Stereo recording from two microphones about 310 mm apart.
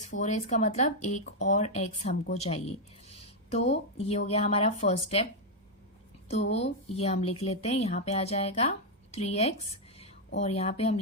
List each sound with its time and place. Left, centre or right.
0.2 s speech: left